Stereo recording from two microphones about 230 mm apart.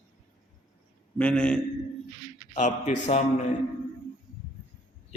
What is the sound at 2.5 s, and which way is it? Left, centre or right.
Speech, left.